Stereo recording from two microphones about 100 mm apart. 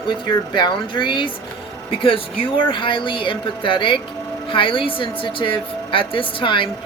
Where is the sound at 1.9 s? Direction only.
65° left (ahead or behind).